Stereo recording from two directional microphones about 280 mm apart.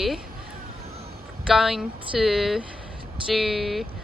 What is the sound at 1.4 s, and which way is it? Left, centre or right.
Speech, centre.